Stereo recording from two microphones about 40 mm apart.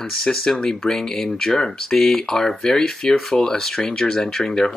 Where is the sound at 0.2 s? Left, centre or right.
Centre.